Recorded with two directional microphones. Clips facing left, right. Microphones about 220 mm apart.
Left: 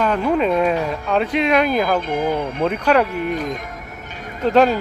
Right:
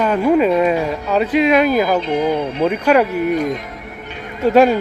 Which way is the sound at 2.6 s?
5° right (ahead or behind).